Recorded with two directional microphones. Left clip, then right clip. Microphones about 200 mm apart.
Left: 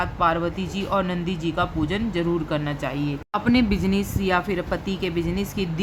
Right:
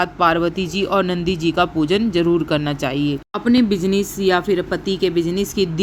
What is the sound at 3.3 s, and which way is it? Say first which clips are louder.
A woman's voice: right 3 dB; 15° right (ahead or behind).